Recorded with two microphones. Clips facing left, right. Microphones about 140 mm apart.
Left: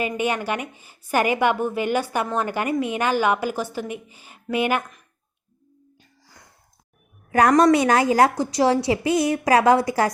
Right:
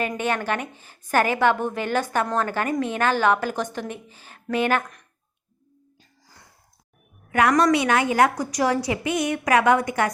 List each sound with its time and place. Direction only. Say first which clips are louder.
0.0 s a woman's voice: left 1 dB; 10° left (ahead or behind)
7.3 s a woman's voice: left 3 dB; 35° left (ahead or behind)